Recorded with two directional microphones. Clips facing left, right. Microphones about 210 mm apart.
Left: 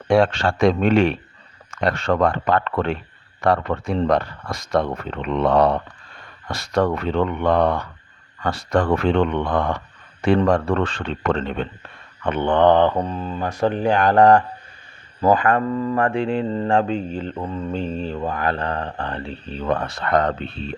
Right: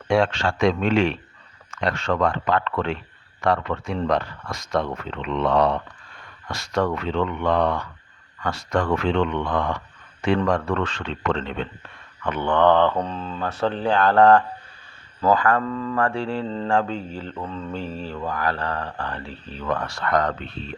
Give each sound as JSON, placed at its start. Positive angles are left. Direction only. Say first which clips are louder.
{"t": 0.1, "sound": "speech", "louder": "left 3 dB", "side_deg": 35}
{"t": 0.8, "sound": "speech", "louder": "left 3 dB", "side_deg": 55}
{"t": 1.7, "sound": "speech", "louder": "left 4 dB", "side_deg": 35}
{"t": 2.3, "sound": "speech", "louder": "left 2 dB", "side_deg": 50}
{"t": 3.4, "sound": "speech", "louder": "left 3 dB", "side_deg": 40}
{"t": 7.1, "sound": "speech", "louder": "left 3 dB", "side_deg": 50}
{"t": 8.4, "sound": "speech", "louder": "left 4 dB", "side_deg": 35}
{"t": 9.0, "sound": "speech", "louder": "left 3 dB", "side_deg": 50}
{"t": 10.2, "sound": "speech", "louder": "left 4 dB", "side_deg": 35}
{"t": 11.0, "sound": "speech", "louder": "left 3 dB", "side_deg": 50}
{"t": 12.2, "sound": "speech", "louder": "left 3 dB", "side_deg": 25}
{"t": 15.2, "sound": "mantra", "louder": "left 2 dB", "side_deg": 20}